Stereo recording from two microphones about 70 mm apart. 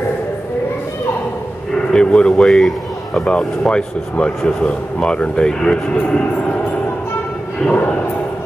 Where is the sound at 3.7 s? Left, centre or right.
Centre.